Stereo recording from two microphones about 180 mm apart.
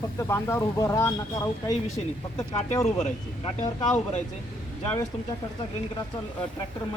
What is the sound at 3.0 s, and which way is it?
Speech, 40° left (ahead or behind).